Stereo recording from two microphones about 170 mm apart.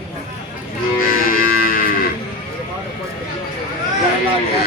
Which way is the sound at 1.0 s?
55° left (ahead or behind).